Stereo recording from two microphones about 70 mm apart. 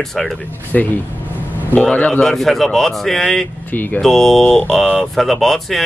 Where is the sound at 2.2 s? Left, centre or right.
Centre.